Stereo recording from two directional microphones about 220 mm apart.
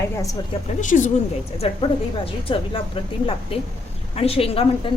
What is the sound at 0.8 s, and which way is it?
A woman's voice, 35° left (ahead or behind).